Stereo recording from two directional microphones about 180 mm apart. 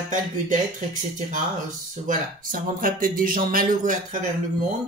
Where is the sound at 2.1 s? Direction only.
50° right (ahead or behind).